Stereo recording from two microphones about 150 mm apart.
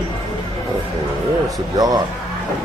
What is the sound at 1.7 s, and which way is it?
Speech, 25° right (ahead or behind).